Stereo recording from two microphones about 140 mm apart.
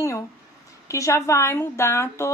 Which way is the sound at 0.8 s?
20° left (ahead or behind).